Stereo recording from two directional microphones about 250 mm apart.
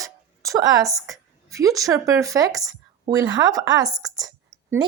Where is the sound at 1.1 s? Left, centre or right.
Centre.